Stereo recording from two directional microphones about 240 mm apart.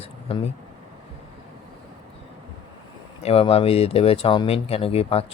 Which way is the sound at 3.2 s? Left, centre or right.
Left.